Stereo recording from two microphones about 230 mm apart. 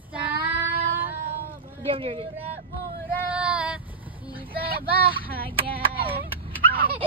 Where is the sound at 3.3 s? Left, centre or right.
Centre.